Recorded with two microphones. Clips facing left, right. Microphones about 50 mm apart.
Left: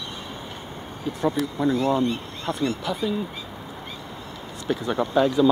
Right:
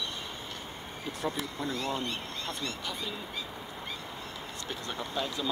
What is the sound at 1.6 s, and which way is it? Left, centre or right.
Speech, left.